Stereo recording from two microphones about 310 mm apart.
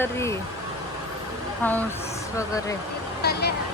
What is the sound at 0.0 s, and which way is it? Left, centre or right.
Speech, centre.